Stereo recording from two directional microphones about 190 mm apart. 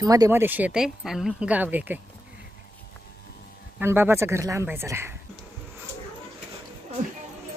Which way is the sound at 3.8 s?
15° right (ahead or behind).